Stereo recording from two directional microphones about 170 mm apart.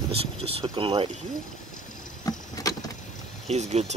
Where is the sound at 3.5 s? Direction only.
40° right (ahead or behind).